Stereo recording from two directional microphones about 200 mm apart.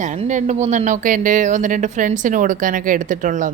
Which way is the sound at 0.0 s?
35° right (ahead or behind).